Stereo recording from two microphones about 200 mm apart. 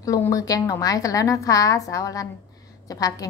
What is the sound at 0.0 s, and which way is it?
A woman's voice, 15° left (ahead or behind).